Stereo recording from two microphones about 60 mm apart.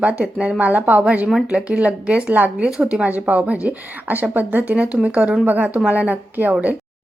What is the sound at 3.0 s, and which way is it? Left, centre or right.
Speech, right.